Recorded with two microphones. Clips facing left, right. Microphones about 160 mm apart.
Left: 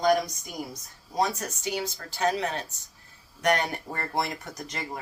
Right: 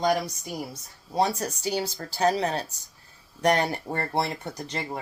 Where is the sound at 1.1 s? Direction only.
30° right (ahead or behind).